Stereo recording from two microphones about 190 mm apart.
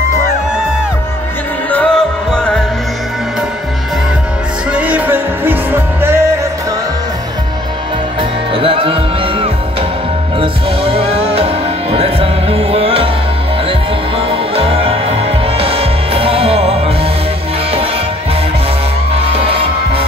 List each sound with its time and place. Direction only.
1.7 s music: 5° left (ahead or behind)
4.7 s music: 5° right (ahead or behind)
8.2 s music: 30° right (ahead or behind)
19.1 s music: 30° right (ahead or behind)